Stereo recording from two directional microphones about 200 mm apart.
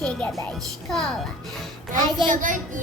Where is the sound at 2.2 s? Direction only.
40° right (ahead or behind).